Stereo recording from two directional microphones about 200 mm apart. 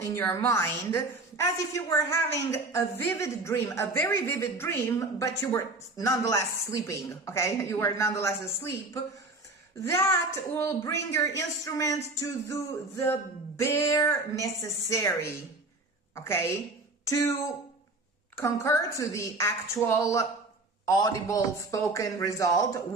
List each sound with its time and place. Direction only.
0.0 s a woman's voice: 15° left (ahead or behind)
18.3 s a woman's voice: 15° left (ahead or behind)